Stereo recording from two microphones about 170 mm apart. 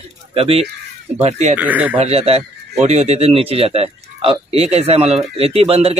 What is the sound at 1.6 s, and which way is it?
Speech, 10° right (ahead or behind).